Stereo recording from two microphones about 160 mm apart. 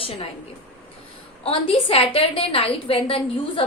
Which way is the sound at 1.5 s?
35° left (ahead or behind).